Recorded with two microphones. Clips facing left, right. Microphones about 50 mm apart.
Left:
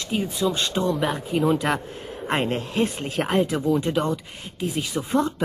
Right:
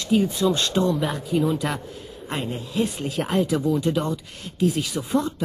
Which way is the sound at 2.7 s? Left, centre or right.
Left.